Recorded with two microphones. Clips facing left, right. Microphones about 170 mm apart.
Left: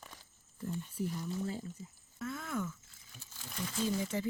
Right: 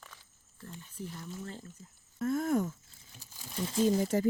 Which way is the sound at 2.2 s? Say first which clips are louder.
Right 9 dB; 40° right (ahead or behind).